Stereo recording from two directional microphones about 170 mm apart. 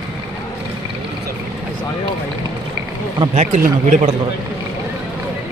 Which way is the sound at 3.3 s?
40° right (ahead or behind).